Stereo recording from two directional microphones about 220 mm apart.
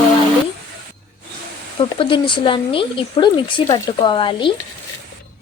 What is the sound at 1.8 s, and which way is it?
Speech, 25° left (ahead or behind).